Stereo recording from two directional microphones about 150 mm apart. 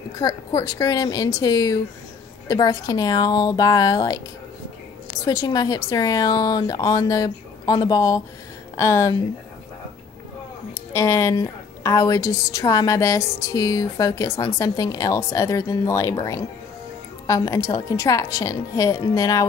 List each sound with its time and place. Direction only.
0.2 s a woman's voice: 20° left (ahead or behind)
5.2 s a woman's voice: 25° left (ahead or behind)
10.7 s a woman's voice: 20° left (ahead or behind)
17.3 s a woman's voice: 20° left (ahead or behind)